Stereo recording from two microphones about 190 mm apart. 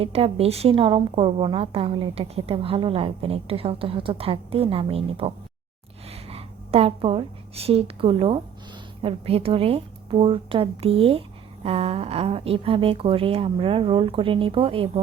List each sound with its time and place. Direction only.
0.0 s a woman's voice: 30° right (ahead or behind)